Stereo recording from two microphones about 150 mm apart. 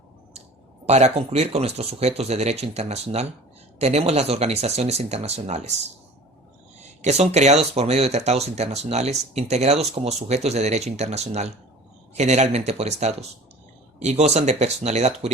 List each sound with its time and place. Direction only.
0.9 s speech: 45° right (ahead or behind)
6.8 s speech: 50° right (ahead or behind)